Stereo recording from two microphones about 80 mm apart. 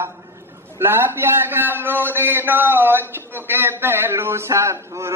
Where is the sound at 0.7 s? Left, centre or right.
Right.